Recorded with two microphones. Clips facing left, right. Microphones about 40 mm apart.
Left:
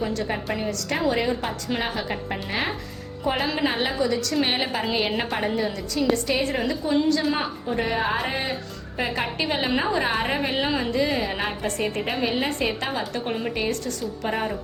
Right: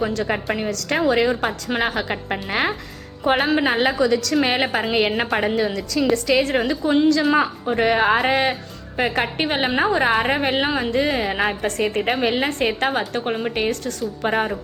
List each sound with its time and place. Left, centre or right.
0.0 s a woman's voice: right
3.3 s a woman's voice: right
3.6 s a woman's voice: right
4.7 s speech: right
5.5 s a woman's voice: right
7.1 s a woman's voice: right
9.0 s a woman's voice: right